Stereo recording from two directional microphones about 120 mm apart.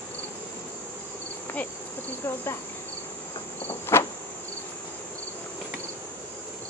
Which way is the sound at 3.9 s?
20° left (ahead or behind).